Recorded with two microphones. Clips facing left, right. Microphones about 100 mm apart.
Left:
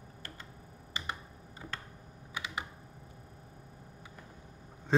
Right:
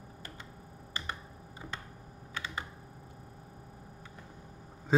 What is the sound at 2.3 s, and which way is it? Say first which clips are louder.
Computer keyboard: even; 15° left (ahead or behind).